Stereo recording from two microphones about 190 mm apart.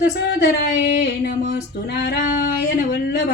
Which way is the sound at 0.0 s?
60° left (ahead or behind).